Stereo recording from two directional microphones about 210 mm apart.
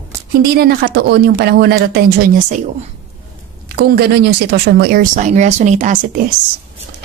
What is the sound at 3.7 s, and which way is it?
A woman's voice, 50° right (ahead or behind).